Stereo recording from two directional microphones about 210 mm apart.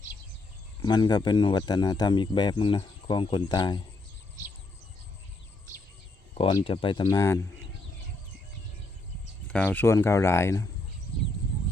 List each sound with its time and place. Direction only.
0.8 s speech: 20° left (ahead or behind)
6.3 s speech: 25° left (ahead or behind)
9.5 s speech: 5° left (ahead or behind)